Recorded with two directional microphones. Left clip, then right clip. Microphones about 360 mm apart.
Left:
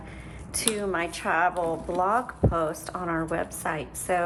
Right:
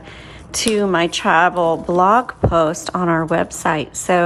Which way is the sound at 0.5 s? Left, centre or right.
Right.